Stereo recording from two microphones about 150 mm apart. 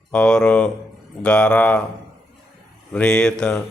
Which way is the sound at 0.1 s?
5° left (ahead or behind).